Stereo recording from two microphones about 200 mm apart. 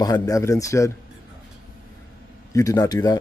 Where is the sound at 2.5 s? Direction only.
15° left (ahead or behind).